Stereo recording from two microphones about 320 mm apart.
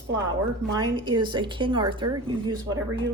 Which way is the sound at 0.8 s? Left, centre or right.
Centre.